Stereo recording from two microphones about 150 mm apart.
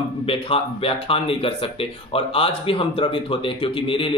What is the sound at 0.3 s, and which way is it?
Speech, 40° left (ahead or behind).